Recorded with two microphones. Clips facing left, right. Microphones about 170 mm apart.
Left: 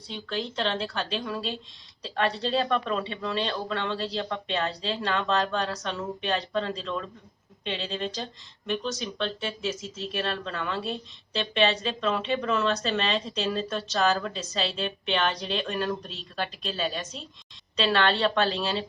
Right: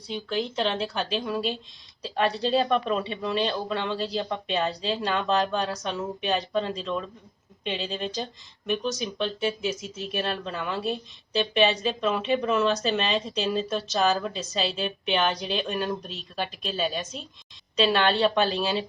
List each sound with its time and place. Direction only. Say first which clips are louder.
0.1 s speech: right 4 dB; 15° right (ahead or behind)
2.1 s speech: right 3 dB; 10° right (ahead or behind)
12.5 s speech: right 2 dB; 5° right (ahead or behind)